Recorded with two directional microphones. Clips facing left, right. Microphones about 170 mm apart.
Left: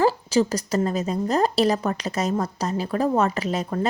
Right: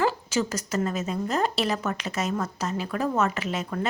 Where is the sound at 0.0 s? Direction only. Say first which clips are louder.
Left 5 dB; 35° left (ahead or behind).